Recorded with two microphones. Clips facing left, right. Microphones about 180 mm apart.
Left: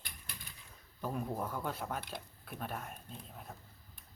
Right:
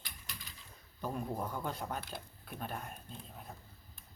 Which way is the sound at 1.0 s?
5° left (ahead or behind).